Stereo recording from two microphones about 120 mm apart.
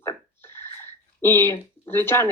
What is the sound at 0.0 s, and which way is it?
Speech, 20° left (ahead or behind).